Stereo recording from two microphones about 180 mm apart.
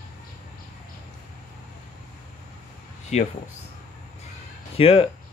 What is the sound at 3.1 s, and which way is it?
Speech, 35° left (ahead or behind).